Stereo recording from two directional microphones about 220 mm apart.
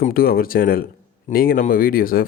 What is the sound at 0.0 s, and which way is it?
Speech, 40° left (ahead or behind).